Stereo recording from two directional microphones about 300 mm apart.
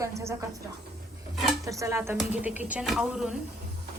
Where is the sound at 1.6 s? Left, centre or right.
Centre.